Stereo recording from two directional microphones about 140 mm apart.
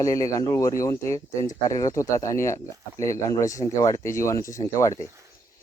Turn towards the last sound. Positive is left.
turn(degrees=20)  # may be behind; listen again after turning